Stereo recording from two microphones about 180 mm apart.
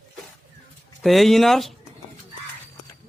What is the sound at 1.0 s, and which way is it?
Speech, centre (ahead or behind).